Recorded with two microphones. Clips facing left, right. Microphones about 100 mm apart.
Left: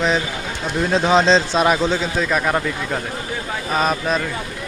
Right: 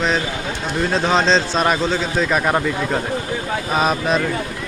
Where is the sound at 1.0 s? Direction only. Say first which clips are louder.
Left 2 dB; 10° left (ahead or behind).